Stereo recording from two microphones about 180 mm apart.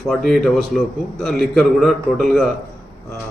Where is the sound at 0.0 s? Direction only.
Centre (ahead or behind).